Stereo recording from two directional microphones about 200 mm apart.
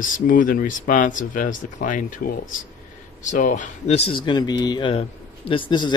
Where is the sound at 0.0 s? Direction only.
40° left (ahead or behind).